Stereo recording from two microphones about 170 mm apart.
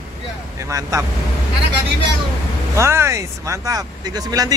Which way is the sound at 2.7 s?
15° right (ahead or behind).